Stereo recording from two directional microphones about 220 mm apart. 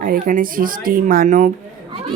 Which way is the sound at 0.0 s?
40° right (ahead or behind).